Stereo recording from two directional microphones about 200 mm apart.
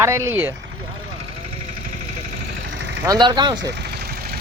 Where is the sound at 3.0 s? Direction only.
20° right (ahead or behind).